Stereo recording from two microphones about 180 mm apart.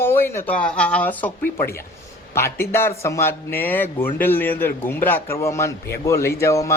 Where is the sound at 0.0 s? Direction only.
15° left (ahead or behind).